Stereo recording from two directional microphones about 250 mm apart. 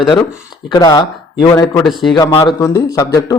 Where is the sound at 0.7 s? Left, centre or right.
Centre.